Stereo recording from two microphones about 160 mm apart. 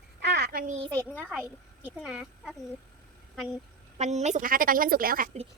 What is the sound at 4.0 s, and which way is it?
A woman's voice, 45° right (ahead or behind).